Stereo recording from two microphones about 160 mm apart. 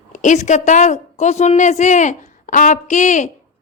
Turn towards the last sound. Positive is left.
turn(degrees=50)  # may be behind; listen again after turning